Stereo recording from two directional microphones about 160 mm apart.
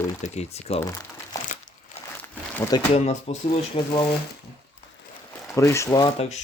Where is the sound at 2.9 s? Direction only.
40° left (ahead or behind).